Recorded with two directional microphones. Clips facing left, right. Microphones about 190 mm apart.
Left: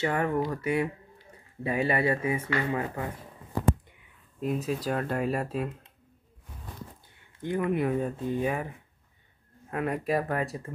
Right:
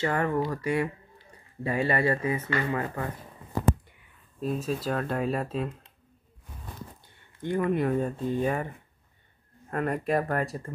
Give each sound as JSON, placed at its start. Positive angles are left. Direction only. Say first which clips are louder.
{"t": 0.0, "sound": "speech", "louder": "even", "side_deg": 5}
{"t": 4.4, "sound": "speech", "louder": "even", "side_deg": 15}
{"t": 7.4, "sound": "speech", "louder": "right 1 dB", "side_deg": 5}